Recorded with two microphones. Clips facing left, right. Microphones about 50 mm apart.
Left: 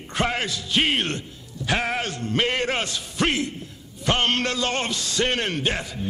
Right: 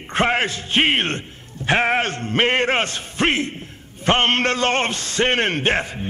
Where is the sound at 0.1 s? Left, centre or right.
Right.